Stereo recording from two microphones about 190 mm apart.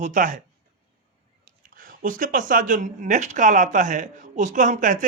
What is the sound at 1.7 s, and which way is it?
Speech, 45° right (ahead or behind).